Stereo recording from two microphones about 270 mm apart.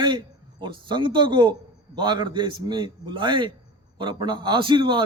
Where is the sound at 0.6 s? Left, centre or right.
Centre.